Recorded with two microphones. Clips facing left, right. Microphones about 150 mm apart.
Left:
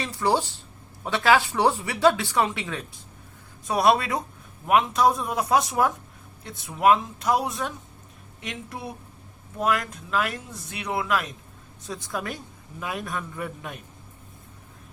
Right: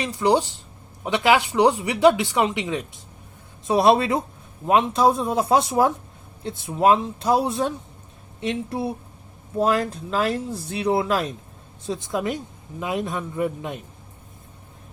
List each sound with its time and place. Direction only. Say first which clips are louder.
0.0 s speech: right 4 dB; 15° right (ahead or behind)